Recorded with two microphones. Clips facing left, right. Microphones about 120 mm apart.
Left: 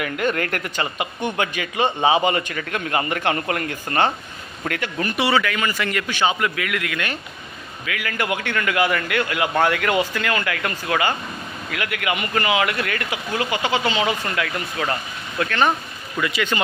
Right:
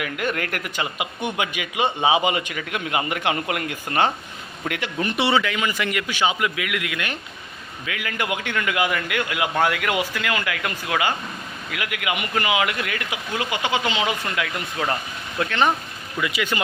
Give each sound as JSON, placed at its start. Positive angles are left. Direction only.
{"t": 0.0, "sound": "speech", "side_deg": -5}